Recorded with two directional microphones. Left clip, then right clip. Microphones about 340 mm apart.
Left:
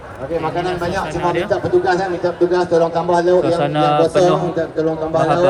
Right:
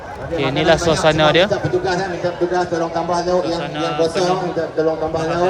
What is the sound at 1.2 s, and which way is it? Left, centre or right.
Speech, centre.